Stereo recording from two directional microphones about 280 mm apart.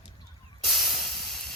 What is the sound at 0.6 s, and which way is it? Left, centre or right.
Hiss, centre.